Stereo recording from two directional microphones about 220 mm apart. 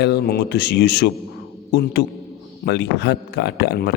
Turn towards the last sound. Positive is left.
turn(degrees=45)  # may be behind; listen again after turning